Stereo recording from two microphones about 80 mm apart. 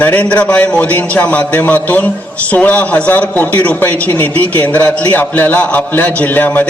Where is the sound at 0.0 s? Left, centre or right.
Centre.